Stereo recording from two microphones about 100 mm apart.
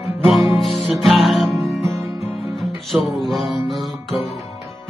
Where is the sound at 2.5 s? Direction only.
Centre (ahead or behind).